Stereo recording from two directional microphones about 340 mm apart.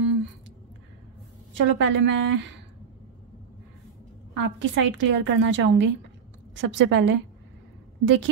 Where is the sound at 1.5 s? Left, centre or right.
Right.